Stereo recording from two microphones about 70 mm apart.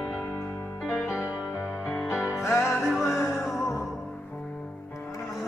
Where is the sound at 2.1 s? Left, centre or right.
Left.